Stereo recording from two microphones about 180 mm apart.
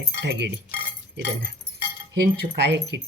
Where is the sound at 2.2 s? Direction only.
65° right (ahead or behind).